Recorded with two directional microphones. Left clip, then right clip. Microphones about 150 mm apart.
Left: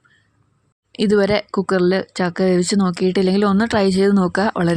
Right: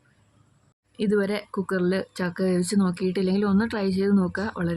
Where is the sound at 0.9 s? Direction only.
35° left (ahead or behind).